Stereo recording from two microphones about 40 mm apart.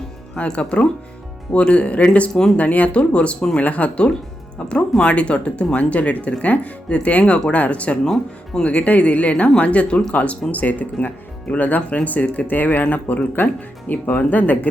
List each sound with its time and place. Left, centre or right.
0.3 s speech: left
8.0 s speech: centre
8.7 s speech: left
13.3 s speech: left